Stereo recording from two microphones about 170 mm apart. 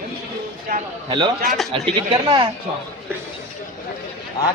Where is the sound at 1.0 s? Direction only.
30° right (ahead or behind).